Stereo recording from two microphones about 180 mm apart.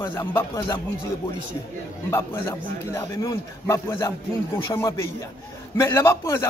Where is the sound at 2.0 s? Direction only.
15° left (ahead or behind).